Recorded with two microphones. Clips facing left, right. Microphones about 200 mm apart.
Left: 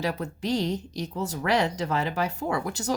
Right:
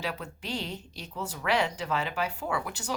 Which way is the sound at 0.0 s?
40° left (ahead or behind).